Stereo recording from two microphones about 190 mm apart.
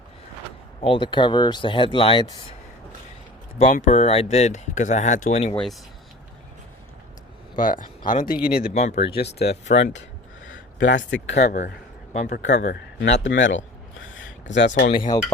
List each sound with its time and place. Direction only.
0.8 s speech: 25° left (ahead or behind)
3.6 s speech: 40° left (ahead or behind)
7.5 s speech: 45° left (ahead or behind)
8.7 s speech: 35° left (ahead or behind)
9.1 s a man's voice: 60° left (ahead or behind)
11.4 s speech: 45° left (ahead or behind)
12.4 s a man's voice: 65° left (ahead or behind)
13.2 s speech: 75° left (ahead or behind)
14.7 s speech: 35° left (ahead or behind)